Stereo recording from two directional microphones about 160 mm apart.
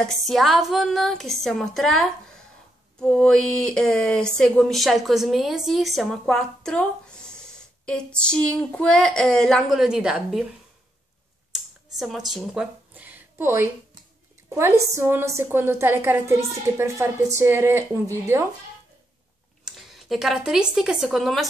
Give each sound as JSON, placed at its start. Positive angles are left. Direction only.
{"t": 0.0, "sound": "speech", "side_deg": 0}
{"t": 11.5, "sound": "a sound", "side_deg": 0}
{"t": 14.5, "sound": "a woman's voice", "side_deg": -15}
{"t": 19.6, "sound": "speech", "side_deg": 0}